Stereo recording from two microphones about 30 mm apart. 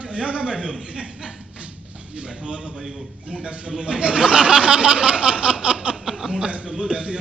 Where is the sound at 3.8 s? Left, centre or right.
Right.